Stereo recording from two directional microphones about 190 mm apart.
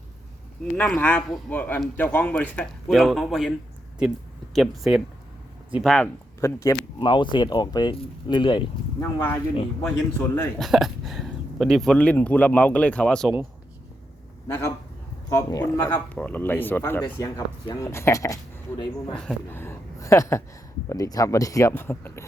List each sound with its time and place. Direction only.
0.6 s a man's voice: 5° left (ahead or behind)
4.5 s speech: centre (ahead or behind)
6.4 s speech: 15° left (ahead or behind)
9.0 s a man's voice: 15° left (ahead or behind)
14.4 s a man's voice: 15° left (ahead or behind)